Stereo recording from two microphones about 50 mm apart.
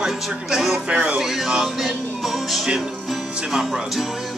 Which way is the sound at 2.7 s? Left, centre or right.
Centre.